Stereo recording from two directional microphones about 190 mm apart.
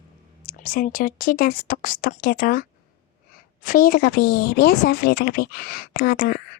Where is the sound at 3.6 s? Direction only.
50° left (ahead or behind).